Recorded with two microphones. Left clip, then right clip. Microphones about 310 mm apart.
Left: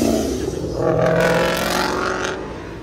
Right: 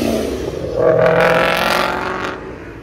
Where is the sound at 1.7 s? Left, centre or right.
Right.